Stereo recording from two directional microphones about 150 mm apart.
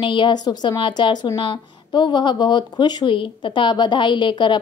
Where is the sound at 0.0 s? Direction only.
30° left (ahead or behind).